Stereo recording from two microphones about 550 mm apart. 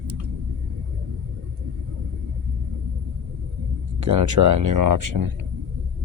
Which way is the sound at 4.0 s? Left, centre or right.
Right.